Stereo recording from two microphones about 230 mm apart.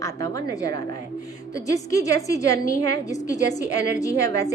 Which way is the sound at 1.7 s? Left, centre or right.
Centre.